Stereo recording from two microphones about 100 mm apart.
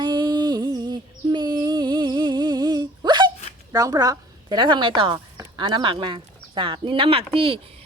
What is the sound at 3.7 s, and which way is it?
A woman's voice, 40° right (ahead or behind).